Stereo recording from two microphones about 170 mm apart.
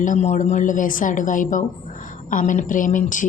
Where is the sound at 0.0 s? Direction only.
45° left (ahead or behind).